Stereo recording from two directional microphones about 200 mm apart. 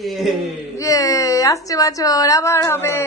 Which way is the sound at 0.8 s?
15° left (ahead or behind).